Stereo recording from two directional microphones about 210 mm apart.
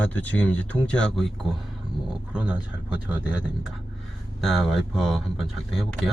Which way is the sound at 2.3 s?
5° right (ahead or behind).